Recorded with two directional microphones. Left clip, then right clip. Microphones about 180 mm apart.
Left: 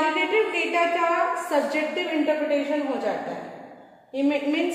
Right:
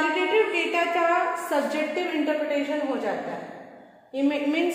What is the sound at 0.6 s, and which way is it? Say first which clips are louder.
Speech: left 1 dB; 30° right (ahead or behind).